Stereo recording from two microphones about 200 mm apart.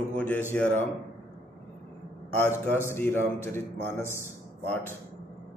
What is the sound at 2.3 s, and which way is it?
Mantra, 10° left (ahead or behind).